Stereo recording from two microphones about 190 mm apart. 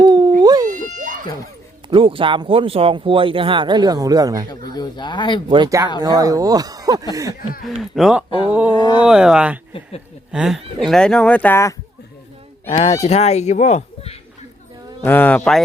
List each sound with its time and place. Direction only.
0.0 s howl: 20° right (ahead or behind)
0.4 s a sound: 20° right (ahead or behind)
1.9 s speech: 25° right (ahead or behind)
4.7 s speech: 20° left (ahead or behind)
5.5 s speech: 20° right (ahead or behind)
7.1 s a sound: 20° right (ahead or behind)
7.8 s speech: centre (ahead or behind)
8.4 s a sound: 5° right (ahead or behind)
8.7 s speech: 25° left (ahead or behind)
9.0 s speech: 5° right (ahead or behind)
12.6 s speech: 30° left (ahead or behind)
15.0 s speech: 10° left (ahead or behind)